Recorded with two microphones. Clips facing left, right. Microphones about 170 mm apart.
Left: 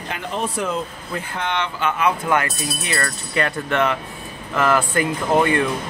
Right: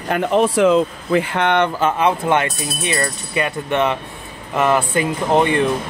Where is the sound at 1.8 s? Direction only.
30° right (ahead or behind).